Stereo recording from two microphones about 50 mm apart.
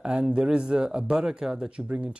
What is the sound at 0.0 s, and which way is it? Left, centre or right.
Speech, centre.